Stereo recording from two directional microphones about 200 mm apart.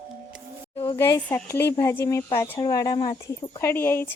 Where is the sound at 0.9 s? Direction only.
15° left (ahead or behind).